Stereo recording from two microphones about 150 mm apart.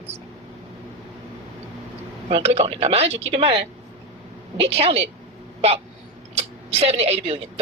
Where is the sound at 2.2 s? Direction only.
45° right (ahead or behind).